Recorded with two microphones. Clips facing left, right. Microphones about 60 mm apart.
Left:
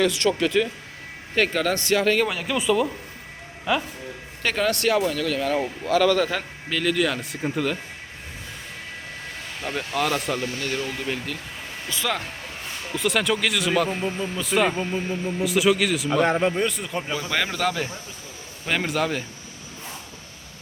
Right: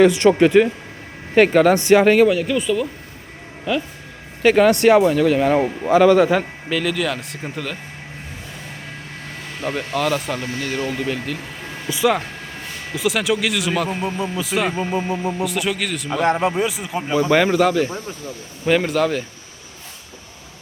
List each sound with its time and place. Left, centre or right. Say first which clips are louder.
0.0 s a man's voice: right 9 dB; right
1.4 s a man's voice: right 9 dB; centre
2.2 s speech: right 7 dB; centre
4.4 s a man's voice: right 10 dB; centre
6.7 s speech: left 1 dB; centre
9.7 s speech: right 3 dB; centre
11.9 s a man's voice: right 9 dB; centre
12.9 s a man's voice: right 3 dB; centre
15.0 s speech: right 4 dB; right
15.4 s a man's voice: left 2 dB; centre